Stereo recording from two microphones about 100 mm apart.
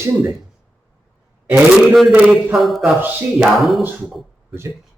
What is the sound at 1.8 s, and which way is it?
Speech, 5° right (ahead or behind).